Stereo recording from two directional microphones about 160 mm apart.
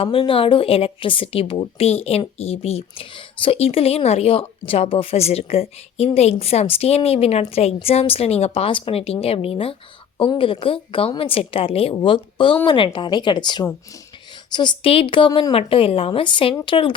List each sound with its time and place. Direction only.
0.0 s speech: 35° left (ahead or behind)